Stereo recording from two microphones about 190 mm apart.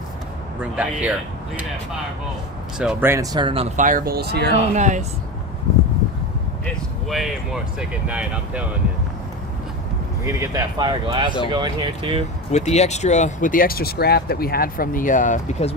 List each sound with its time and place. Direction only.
0.6 s speech: 5° right (ahead or behind)
2.7 s speech: 5° right (ahead or behind); by 3.8 s 30° right (ahead or behind)
3.8 s speech: 50° right (ahead or behind)
4.7 s speech: 40° right (ahead or behind)
6.7 s speech: centre (ahead or behind)
10.2 s speech: 15° right (ahead or behind)
12.5 s speech: 35° left (ahead or behind)